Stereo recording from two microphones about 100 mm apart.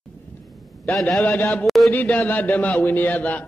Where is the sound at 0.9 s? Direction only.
10° left (ahead or behind).